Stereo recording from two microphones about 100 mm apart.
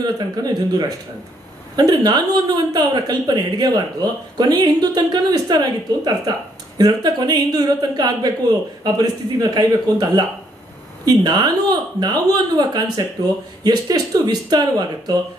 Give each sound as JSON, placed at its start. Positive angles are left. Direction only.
{"t": 0.0, "sound": "a woman's voice", "side_deg": -40}